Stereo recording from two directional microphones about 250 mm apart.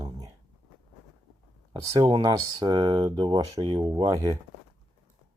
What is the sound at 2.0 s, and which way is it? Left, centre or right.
Speech, centre.